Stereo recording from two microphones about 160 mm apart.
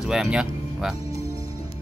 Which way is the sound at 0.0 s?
5° right (ahead or behind).